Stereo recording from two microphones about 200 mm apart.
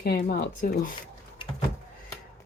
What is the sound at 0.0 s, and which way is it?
Speech, 50° left (ahead or behind).